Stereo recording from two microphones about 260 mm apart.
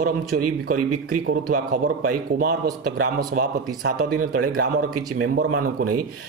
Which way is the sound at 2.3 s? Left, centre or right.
Right.